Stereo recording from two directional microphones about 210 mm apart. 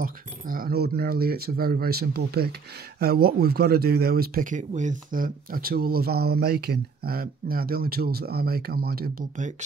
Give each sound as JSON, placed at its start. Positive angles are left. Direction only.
{"t": 0.0, "sound": "speech", "side_deg": -45}